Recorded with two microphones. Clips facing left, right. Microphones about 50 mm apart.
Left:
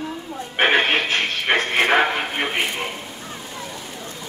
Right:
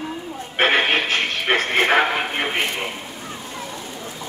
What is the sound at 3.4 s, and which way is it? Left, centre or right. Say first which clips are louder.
Rain: right 1 dB; centre.